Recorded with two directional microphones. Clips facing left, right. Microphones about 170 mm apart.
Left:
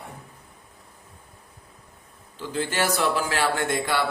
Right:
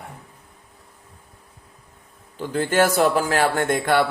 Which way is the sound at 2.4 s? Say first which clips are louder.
Right 7 dB; 50° right (ahead or behind).